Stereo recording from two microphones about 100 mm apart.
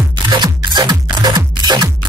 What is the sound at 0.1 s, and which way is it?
Music, 50° right (ahead or behind).